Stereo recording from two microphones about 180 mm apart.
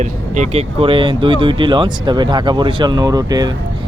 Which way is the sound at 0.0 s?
40° right (ahead or behind).